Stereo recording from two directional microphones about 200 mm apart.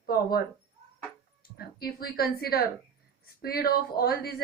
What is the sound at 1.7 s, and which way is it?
A woman's voice, 50° left (ahead or behind).